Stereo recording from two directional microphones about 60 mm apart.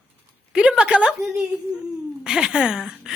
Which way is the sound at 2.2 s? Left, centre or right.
Centre.